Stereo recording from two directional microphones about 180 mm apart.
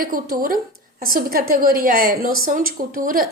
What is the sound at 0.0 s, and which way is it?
A woman's voice, 50° right (ahead or behind).